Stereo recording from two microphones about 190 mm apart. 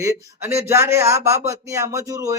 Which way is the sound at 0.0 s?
15° right (ahead or behind).